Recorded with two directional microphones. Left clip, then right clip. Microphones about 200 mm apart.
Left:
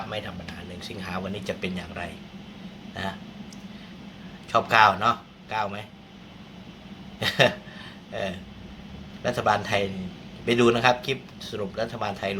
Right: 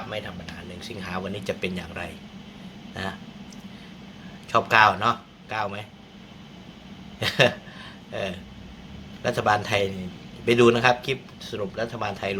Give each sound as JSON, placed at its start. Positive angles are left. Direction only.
{"t": 0.1, "sound": "speech", "side_deg": 0}
{"t": 2.9, "sound": "a sound", "side_deg": -15}
{"t": 4.5, "sound": "speech", "side_deg": -15}
{"t": 7.2, "sound": "a man's voice", "side_deg": -15}